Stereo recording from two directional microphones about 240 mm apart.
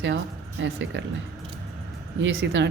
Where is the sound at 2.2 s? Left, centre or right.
Right.